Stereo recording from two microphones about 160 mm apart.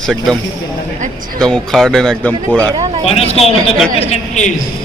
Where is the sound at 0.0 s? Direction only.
5° left (ahead or behind).